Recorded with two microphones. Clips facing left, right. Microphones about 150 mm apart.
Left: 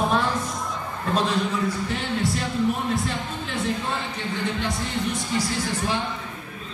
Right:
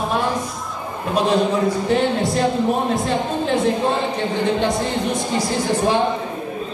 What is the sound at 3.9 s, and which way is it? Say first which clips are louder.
Speech: right 8 dB; 20° right (ahead or behind).